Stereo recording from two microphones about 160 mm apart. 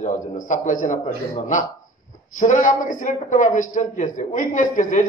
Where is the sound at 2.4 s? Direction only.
50° left (ahead or behind).